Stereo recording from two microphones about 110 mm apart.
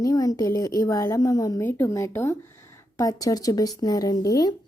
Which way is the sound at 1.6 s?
20° left (ahead or behind).